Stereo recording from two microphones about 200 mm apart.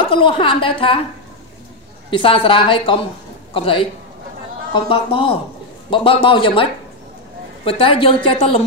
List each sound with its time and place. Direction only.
0.1 s a woman's voice: 25° left (ahead or behind)
2.0 s a woman's voice: 25° left (ahead or behind)